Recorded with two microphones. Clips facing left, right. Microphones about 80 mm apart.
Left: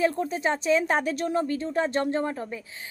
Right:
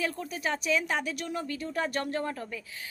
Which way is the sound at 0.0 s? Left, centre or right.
Left.